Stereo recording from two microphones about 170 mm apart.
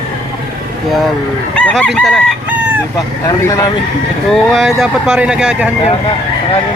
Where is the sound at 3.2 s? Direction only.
20° left (ahead or behind).